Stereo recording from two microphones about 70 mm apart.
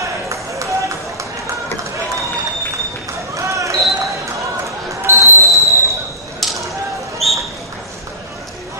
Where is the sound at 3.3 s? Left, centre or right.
Right.